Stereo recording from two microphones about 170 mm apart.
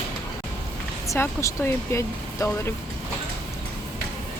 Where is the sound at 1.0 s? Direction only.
15° left (ahead or behind).